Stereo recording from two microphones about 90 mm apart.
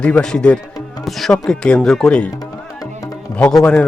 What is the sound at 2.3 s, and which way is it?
Music, 40° left (ahead or behind).